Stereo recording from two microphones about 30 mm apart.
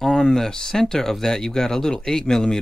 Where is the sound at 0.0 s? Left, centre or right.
Centre.